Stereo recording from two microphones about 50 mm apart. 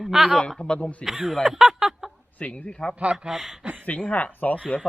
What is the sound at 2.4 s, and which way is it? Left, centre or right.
Speech, left.